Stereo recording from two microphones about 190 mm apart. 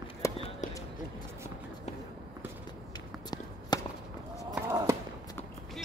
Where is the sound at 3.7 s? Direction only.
20° left (ahead or behind).